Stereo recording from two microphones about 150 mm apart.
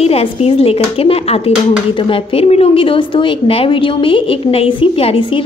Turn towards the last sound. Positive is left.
turn(degrees=40)  # may be behind; listen again after turning